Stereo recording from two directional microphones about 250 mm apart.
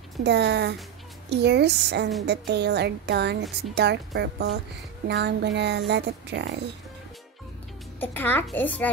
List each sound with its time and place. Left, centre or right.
0.2 s speech: right
8.0 s a child's voice: centre